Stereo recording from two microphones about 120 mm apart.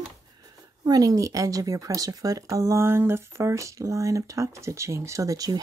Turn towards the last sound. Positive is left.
turn(degrees=-30)  # may be behind; listen again after turning